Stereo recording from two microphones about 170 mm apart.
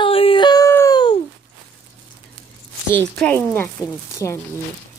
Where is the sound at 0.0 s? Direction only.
35° left (ahead or behind).